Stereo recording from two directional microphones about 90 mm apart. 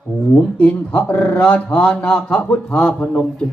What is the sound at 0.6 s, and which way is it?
Speech, 20° left (ahead or behind).